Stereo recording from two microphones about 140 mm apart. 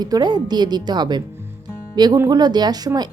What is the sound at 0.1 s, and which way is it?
A woman's voice, 30° right (ahead or behind).